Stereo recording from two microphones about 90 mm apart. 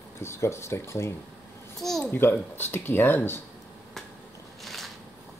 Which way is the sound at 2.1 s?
25° left (ahead or behind).